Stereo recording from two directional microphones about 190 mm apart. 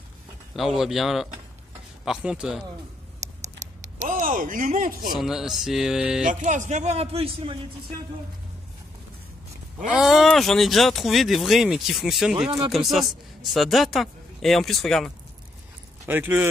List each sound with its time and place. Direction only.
0.6 s speech: centre (ahead or behind)
3.5 s speech: 40° right (ahead or behind)
5.1 s speech: centre (ahead or behind)
6.4 s speech: 40° right (ahead or behind)
9.9 s speech: centre (ahead or behind)
12.4 s speech: 20° right (ahead or behind)
12.7 s speech: centre (ahead or behind)
16.1 s speech: 10° right (ahead or behind)